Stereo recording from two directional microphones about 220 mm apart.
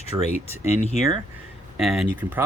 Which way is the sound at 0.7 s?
30° left (ahead or behind).